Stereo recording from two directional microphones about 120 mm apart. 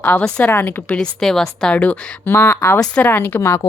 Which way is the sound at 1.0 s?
5° left (ahead or behind).